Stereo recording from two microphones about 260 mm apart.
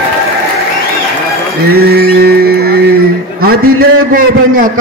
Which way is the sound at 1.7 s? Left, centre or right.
Right.